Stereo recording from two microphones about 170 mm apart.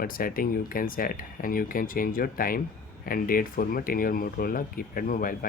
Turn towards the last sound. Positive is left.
turn(degrees=55)  # may be behind; listen again after turning